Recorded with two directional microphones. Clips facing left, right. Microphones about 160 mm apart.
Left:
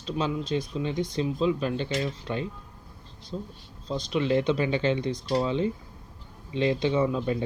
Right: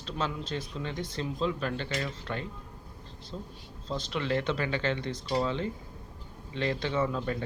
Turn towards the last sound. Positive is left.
turn(degrees=15)  # may be behind; listen again after turning